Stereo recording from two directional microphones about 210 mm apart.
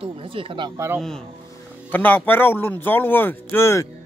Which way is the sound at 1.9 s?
10° left (ahead or behind).